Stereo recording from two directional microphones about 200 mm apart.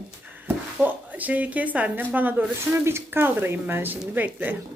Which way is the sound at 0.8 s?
10° right (ahead or behind).